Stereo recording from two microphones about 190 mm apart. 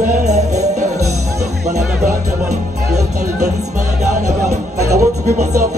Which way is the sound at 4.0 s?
35° right (ahead or behind).